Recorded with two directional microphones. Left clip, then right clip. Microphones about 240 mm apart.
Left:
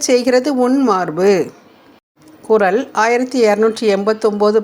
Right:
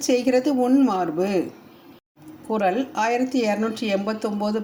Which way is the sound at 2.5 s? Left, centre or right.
Left.